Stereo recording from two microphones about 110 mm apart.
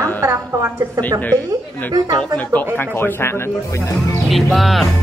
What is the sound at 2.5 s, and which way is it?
Speech, 20° left (ahead or behind).